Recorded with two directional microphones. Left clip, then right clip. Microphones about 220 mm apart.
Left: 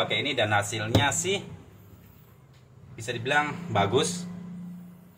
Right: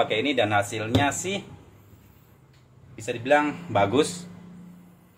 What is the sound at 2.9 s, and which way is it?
Speech, 35° right (ahead or behind).